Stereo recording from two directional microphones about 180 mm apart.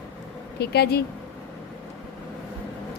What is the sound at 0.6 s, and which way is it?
Speech, 65° left (ahead or behind).